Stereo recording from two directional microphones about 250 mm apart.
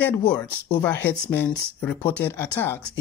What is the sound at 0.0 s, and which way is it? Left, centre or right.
Speech, centre.